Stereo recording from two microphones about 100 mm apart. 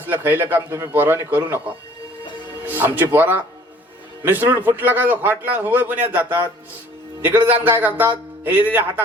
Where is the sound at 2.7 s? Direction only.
20° right (ahead or behind).